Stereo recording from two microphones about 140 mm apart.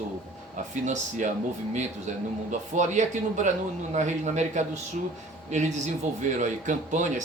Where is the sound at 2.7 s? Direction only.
60° right (ahead or behind).